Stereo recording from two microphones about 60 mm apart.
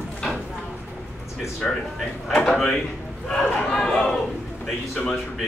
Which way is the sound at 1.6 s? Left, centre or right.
Centre.